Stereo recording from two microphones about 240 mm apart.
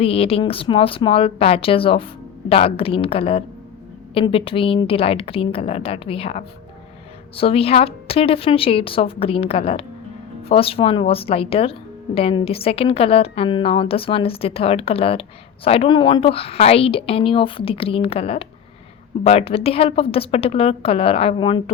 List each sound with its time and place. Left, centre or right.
0.0 s speech: left